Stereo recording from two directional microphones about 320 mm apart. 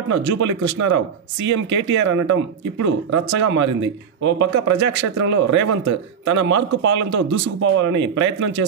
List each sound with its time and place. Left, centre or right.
0.2 s speech: right